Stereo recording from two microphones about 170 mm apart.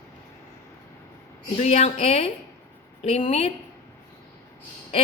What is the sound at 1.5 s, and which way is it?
Speech, 40° left (ahead or behind).